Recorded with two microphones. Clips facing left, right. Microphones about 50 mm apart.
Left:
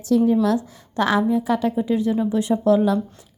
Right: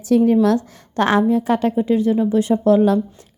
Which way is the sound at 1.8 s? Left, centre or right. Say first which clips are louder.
Right 4 dB; right.